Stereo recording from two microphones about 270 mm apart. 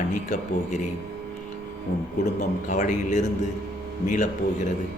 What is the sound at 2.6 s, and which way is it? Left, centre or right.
A man's voice, left.